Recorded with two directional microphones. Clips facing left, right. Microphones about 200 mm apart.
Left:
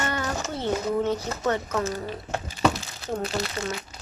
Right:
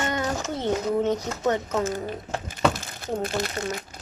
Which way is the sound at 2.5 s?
55° right (ahead or behind).